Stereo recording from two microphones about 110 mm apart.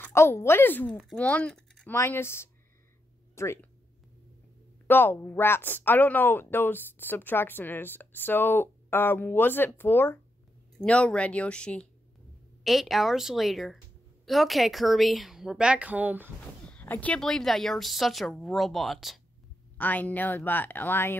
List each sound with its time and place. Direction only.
0.0 s a woman's voice: 25° left (ahead or behind); by 1.9 s 10° left (ahead or behind)
1.9 s a woman's voice: 20° left (ahead or behind)
4.8 s a woman's voice: 20° left (ahead or behind)
10.8 s speech: 10° left (ahead or behind)
12.6 s a woman's voice: centre (ahead or behind)
16.6 s a sound: 15° left (ahead or behind)
17.2 s a woman's voice: 5° left (ahead or behind)
19.8 s speech: 15° left (ahead or behind)